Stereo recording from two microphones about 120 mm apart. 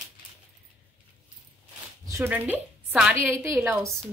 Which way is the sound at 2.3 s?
15° right (ahead or behind).